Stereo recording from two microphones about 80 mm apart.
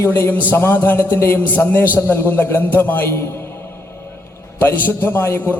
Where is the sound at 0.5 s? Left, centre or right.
Left.